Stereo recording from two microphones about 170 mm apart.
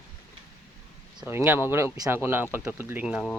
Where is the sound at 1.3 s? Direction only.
15° right (ahead or behind).